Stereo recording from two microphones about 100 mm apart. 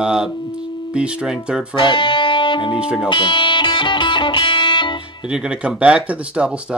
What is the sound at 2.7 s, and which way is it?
Speech, 10° right (ahead or behind).